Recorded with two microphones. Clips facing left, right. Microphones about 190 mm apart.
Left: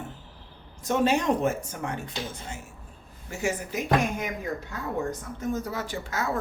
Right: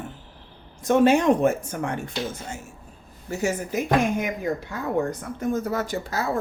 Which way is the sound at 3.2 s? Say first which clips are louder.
Right 4 dB; 40° right (ahead or behind).